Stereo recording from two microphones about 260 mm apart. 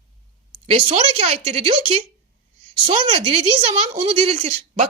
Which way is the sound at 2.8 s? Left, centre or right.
Right.